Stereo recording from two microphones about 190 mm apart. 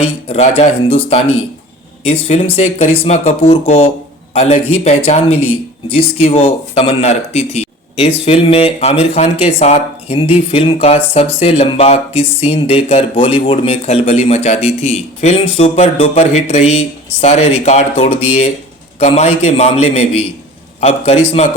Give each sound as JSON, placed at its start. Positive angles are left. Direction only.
{"t": 0.3, "sound": "speech", "side_deg": 35}
{"t": 2.2, "sound": "speech", "side_deg": 35}